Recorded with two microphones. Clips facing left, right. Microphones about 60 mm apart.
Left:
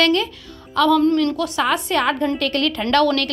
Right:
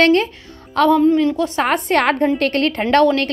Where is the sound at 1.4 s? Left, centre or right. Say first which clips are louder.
Right 2 dB; right.